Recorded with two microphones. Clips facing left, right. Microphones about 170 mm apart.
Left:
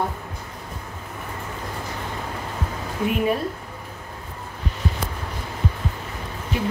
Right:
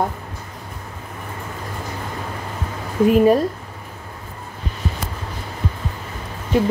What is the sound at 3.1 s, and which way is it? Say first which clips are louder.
Speech: right 9 dB; 40° right (ahead or behind).